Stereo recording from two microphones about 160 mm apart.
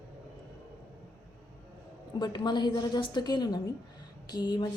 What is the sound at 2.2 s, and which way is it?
A woman's voice, 25° left (ahead or behind).